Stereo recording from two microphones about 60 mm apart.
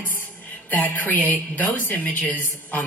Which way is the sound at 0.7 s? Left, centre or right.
Left.